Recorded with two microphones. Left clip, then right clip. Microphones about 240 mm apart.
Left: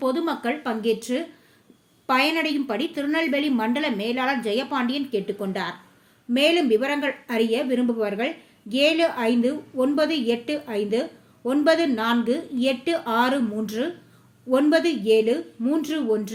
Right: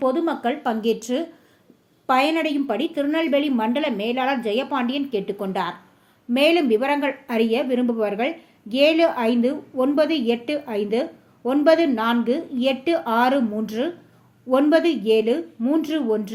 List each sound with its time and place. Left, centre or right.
0.0 s a woman's voice: centre
0.6 s a woman's voice: centre